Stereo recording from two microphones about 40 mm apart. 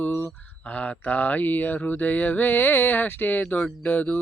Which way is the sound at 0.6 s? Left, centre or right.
Left.